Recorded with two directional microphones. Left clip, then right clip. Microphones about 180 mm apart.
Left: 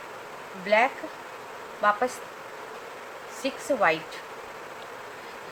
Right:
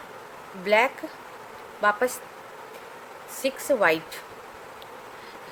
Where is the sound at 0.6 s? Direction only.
60° right (ahead or behind).